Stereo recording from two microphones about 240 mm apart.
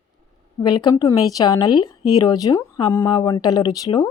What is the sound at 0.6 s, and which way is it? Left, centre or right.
A woman's voice, centre.